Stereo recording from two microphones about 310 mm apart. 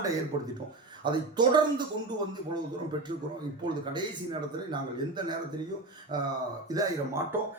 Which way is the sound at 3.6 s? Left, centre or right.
Centre.